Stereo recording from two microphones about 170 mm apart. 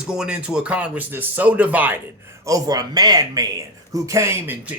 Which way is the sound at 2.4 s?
20° right (ahead or behind).